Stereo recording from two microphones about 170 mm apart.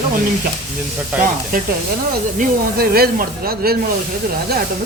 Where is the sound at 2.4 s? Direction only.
60° right (ahead or behind).